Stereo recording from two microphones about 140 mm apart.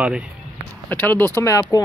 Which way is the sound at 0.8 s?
15° left (ahead or behind).